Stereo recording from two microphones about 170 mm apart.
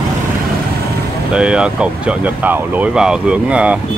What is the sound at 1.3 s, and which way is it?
Speech, 5° right (ahead or behind).